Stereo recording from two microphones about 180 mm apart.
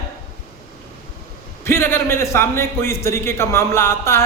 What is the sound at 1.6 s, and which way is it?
A man's voice, 15° left (ahead or behind).